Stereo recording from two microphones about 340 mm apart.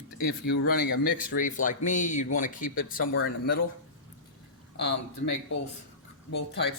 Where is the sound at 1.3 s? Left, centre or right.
Left.